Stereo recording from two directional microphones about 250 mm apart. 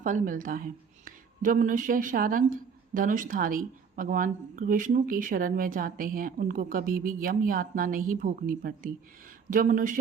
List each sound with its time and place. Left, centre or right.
0.0 s speech: right